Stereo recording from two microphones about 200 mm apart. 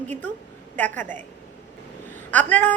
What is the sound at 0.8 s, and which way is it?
Speech, 10° left (ahead or behind).